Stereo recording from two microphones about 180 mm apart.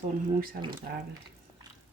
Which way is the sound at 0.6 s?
65° right (ahead or behind).